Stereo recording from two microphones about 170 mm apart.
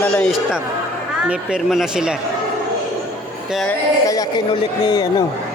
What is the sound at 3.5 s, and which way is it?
Speech, centre (ahead or behind).